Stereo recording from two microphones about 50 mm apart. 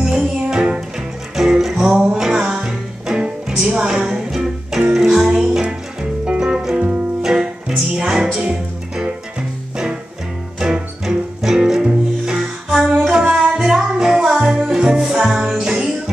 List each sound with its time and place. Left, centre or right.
0.0 s music: centre
10.6 s music: centre